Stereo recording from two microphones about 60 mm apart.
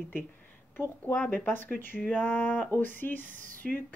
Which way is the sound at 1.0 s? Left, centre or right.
Centre.